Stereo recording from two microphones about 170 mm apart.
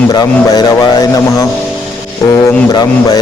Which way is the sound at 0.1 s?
25° left (ahead or behind).